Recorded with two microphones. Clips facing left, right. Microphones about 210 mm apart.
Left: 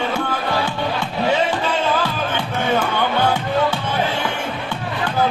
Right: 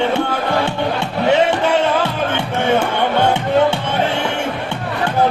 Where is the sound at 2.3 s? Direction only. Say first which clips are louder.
Right 4 dB; 25° right (ahead or behind).